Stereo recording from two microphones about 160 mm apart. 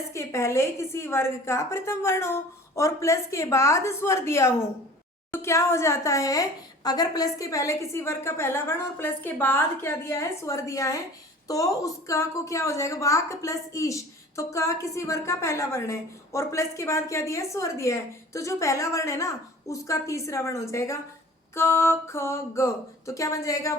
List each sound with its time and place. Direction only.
0.1 s a woman's voice: 20° left (ahead or behind)